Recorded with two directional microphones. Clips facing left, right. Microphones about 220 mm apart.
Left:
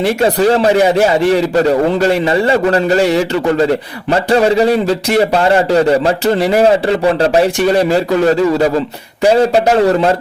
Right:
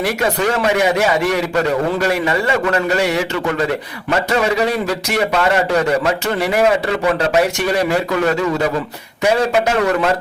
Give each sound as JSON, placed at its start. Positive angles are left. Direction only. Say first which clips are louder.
{"t": 0.0, "sound": "speech", "louder": "left 6 dB", "side_deg": 30}